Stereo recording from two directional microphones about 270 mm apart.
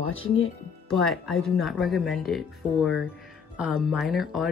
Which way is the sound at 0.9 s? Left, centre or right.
Centre.